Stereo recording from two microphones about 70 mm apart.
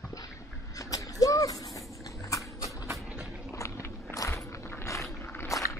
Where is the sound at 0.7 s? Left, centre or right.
Left.